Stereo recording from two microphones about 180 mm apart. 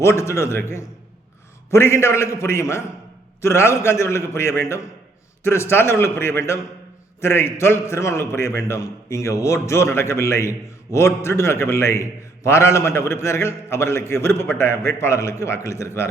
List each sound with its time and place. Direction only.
0.0 s a man's voice: 15° left (ahead or behind)